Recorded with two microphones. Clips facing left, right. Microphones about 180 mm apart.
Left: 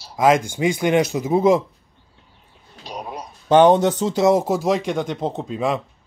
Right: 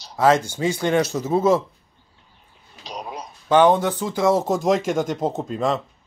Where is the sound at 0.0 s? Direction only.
10° left (ahead or behind).